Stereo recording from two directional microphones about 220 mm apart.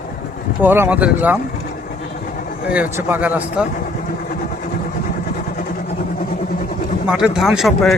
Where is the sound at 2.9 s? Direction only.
10° right (ahead or behind).